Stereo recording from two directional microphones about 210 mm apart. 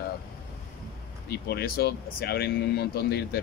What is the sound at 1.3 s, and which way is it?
Speech, 50° left (ahead or behind).